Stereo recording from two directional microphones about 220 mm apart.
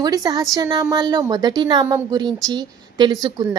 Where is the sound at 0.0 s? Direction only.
15° right (ahead or behind).